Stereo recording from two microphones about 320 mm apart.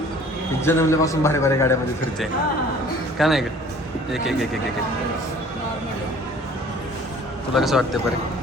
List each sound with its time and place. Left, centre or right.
0.6 s a man's voice: centre
3.2 s a man's voice: centre
7.5 s a man's voice: centre